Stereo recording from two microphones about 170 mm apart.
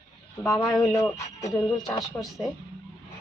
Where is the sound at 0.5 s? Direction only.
Centre (ahead or behind).